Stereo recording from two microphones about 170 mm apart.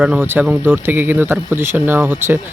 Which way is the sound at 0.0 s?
10° right (ahead or behind).